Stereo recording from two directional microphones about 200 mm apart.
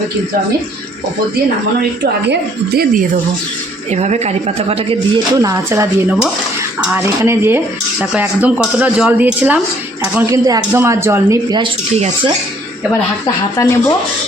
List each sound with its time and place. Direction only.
2.2 s a woman's voice: 55° right (ahead or behind)
3.9 s speech: 35° right (ahead or behind)
5.4 s speech: 15° right (ahead or behind)
13.2 s speech: 15° left (ahead or behind)